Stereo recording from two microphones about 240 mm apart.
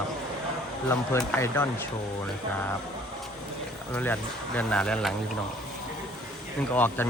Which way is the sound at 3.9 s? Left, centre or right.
Centre.